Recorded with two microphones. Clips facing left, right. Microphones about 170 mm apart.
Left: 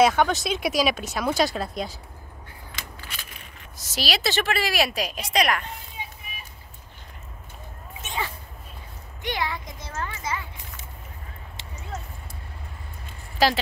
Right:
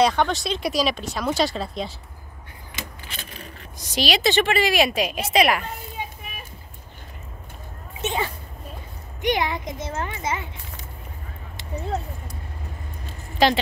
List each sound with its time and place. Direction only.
0.0 s speech: 5° left (ahead or behind)
2.7 s a sound: 20° right (ahead or behind)
3.8 s speech: centre (ahead or behind)
9.2 s speech: 20° right (ahead or behind)
13.4 s speech: centre (ahead or behind)